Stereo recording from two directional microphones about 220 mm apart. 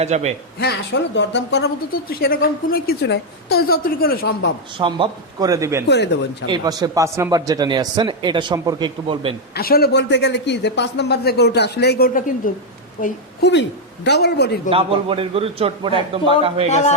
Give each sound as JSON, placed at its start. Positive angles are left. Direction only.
{"t": 0.0, "sound": "a man's voice", "side_deg": -30}
{"t": 0.6, "sound": "speech", "side_deg": 50}
{"t": 4.8, "sound": "speech", "side_deg": -20}
{"t": 9.6, "sound": "speech", "side_deg": 45}
{"t": 13.0, "sound": "speech", "side_deg": 50}
{"t": 14.7, "sound": "a man's voice", "side_deg": -25}
{"t": 16.6, "sound": "speech", "side_deg": 30}